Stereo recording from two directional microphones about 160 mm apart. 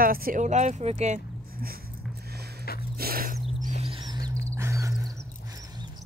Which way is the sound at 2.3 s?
85° right.